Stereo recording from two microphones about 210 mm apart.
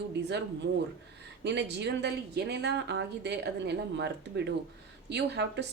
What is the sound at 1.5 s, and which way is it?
A woman's voice, 55° right (ahead or behind).